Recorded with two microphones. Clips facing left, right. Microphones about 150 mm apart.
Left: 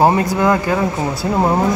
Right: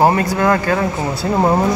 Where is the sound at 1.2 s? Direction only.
Centre (ahead or behind).